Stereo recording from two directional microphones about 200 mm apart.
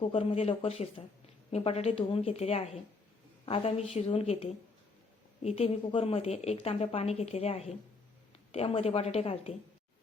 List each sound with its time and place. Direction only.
0.0 s a woman's voice: 25° left (ahead or behind)